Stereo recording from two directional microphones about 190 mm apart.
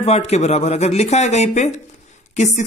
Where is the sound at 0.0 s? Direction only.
35° left (ahead or behind).